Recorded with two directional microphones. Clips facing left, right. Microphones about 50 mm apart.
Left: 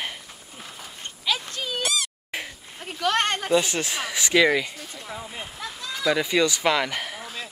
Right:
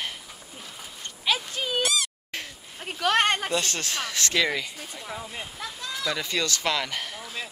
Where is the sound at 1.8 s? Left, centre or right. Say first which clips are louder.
Right 1 dB; centre.